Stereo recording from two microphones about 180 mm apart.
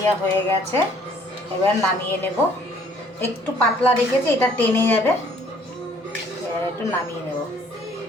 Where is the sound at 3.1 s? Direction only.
10° left (ahead or behind).